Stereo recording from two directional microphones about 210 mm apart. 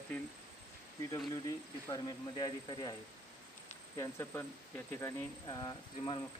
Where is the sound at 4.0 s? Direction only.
10° left (ahead or behind).